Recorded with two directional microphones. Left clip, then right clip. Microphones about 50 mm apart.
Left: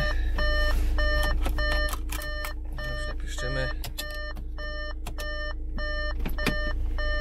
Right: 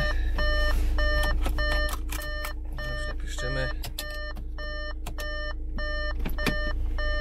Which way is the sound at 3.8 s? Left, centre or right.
Right.